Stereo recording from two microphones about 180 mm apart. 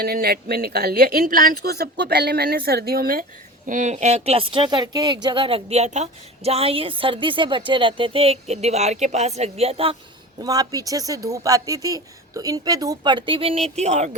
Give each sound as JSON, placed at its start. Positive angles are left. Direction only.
{"t": 0.0, "sound": "a woman's voice", "side_deg": -60}
{"t": 3.7, "sound": "speech", "side_deg": -45}
{"t": 10.4, "sound": "speech", "side_deg": -20}